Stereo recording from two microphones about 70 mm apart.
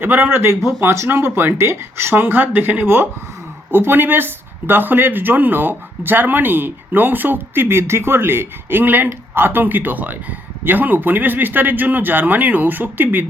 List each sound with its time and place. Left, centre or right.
0.0 s speech: right